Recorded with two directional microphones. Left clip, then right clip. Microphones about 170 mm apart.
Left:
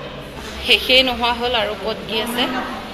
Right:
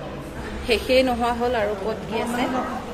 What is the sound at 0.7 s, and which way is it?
A woman's voice, 30° right (ahead or behind).